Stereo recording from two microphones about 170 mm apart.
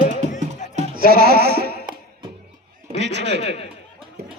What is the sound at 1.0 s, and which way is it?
Music, 65° right (ahead or behind).